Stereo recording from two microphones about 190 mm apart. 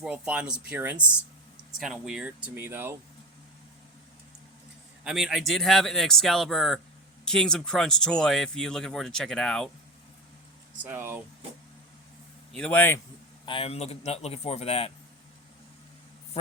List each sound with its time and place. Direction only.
0.0 s speech: 5° right (ahead or behind)
5.0 s speech: 5° right (ahead or behind)
10.8 s speech: 10° right (ahead or behind)
12.5 s a man's voice: 10° left (ahead or behind)
13.4 s a man's voice: 30° left (ahead or behind)